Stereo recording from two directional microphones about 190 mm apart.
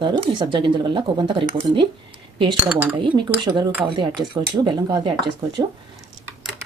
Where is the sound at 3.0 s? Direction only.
25° right (ahead or behind).